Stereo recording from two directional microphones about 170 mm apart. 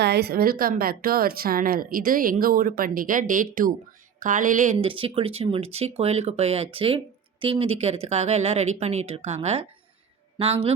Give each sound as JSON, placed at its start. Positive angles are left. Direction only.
{"t": 0.0, "sound": "a woman's voice", "side_deg": -75}
{"t": 4.9, "sound": "a woman's voice", "side_deg": -30}